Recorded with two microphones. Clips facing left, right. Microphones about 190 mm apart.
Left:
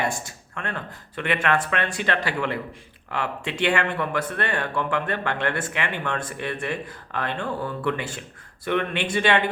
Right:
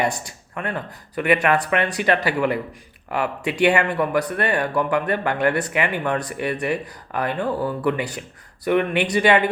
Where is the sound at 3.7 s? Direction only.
10° right (ahead or behind).